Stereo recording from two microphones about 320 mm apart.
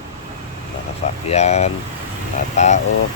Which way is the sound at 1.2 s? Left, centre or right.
Left.